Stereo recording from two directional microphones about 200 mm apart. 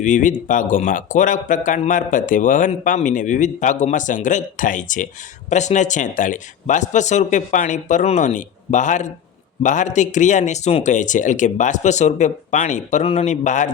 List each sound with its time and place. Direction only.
0.0 s speech: 40° left (ahead or behind)